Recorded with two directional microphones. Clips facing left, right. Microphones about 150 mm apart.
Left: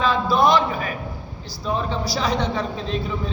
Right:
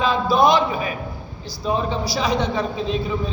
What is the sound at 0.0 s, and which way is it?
A man's voice, 15° right (ahead or behind).